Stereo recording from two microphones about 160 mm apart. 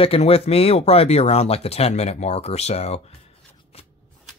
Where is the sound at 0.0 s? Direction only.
35° left (ahead or behind).